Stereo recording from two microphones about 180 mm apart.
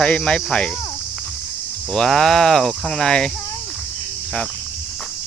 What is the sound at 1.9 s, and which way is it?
Speech, 5° left (ahead or behind).